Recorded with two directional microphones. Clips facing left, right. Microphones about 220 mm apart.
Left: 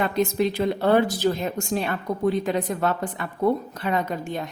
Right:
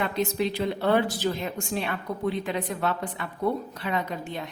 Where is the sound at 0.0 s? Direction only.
45° left (ahead or behind).